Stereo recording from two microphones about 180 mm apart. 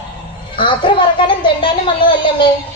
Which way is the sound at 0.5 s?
25° left (ahead or behind).